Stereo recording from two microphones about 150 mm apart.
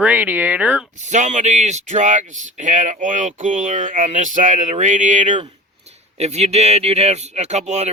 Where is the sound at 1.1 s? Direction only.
55° right (ahead or behind).